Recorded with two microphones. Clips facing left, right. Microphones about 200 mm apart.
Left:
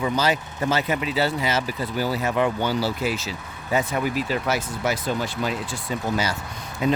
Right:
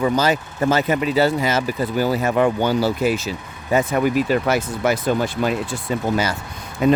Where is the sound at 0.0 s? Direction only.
45° right (ahead or behind).